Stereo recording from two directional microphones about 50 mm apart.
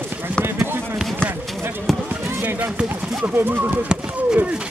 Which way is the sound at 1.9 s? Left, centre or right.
Centre.